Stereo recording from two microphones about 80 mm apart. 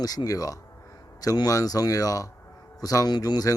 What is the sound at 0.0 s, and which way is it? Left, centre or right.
Speech, left.